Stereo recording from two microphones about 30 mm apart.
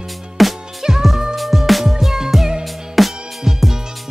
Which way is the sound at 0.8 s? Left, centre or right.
Right.